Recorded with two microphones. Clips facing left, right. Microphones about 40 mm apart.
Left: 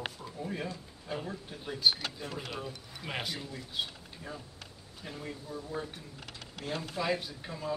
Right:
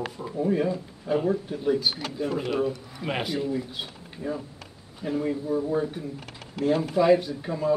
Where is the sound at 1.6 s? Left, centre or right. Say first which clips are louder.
Right 2 dB; centre.